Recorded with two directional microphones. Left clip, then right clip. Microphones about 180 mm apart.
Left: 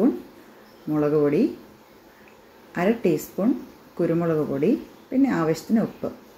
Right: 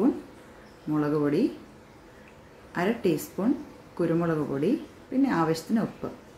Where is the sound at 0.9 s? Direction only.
20° left (ahead or behind).